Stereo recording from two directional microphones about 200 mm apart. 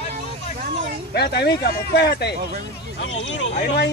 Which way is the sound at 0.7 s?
35° right (ahead or behind).